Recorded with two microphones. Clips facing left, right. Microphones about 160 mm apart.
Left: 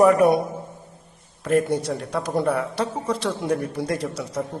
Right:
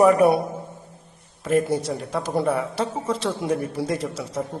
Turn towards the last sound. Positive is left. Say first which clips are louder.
# even
turn(degrees=0)  # may be behind; listen again after turning